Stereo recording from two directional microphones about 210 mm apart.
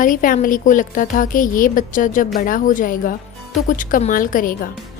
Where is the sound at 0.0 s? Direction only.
40° left (ahead or behind).